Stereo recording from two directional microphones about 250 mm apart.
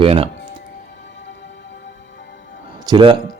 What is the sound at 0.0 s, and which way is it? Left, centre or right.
Speech, right.